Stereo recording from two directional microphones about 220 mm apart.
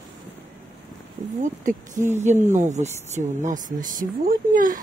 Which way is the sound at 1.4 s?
35° right (ahead or behind).